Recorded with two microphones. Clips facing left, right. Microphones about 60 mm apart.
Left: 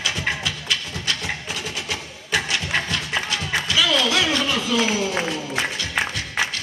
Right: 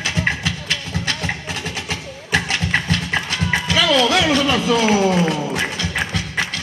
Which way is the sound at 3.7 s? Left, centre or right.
Right.